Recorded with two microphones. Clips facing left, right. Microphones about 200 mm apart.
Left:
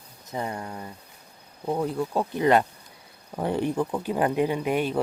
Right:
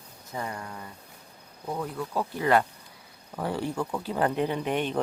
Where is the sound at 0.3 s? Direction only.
25° left (ahead or behind).